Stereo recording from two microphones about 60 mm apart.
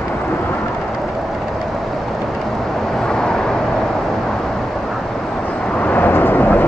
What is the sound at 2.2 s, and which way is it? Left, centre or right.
Vehicle, centre.